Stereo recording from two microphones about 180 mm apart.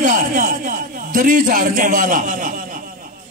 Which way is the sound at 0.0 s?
45° right (ahead or behind).